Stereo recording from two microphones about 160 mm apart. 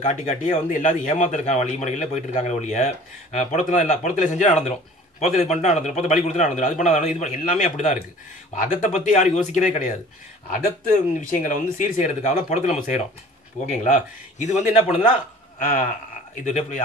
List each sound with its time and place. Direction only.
0.0 s a man's voice: 50° left (ahead or behind)
16.4 s a man's voice: 50° left (ahead or behind)